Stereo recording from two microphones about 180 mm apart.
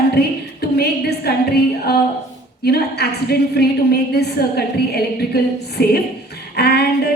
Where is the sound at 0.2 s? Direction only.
65° left (ahead or behind).